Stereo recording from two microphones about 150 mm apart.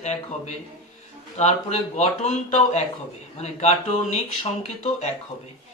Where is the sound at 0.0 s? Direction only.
50° left (ahead or behind).